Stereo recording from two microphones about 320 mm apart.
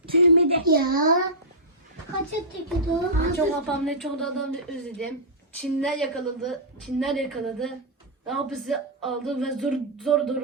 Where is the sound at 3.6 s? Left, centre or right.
Centre.